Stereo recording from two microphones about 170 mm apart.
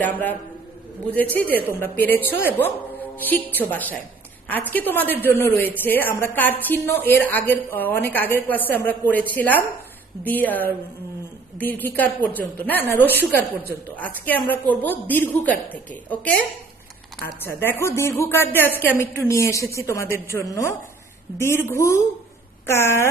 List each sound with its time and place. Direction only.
0.0 s a woman's voice: 10° left (ahead or behind)
17.6 s a woman's voice: 15° left (ahead or behind)